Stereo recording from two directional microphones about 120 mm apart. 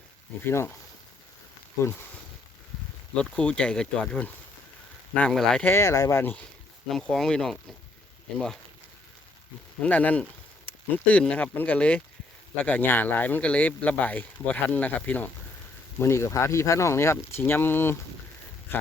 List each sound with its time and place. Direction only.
0.4 s speech: 20° left (ahead or behind)
3.2 s speech: 10° left (ahead or behind)
5.6 s speech: 25° left (ahead or behind)
6.8 s speech: 5° left (ahead or behind)
9.8 s speech: 15° left (ahead or behind)